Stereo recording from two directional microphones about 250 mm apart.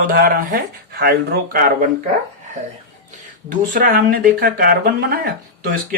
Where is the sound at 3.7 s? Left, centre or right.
Right.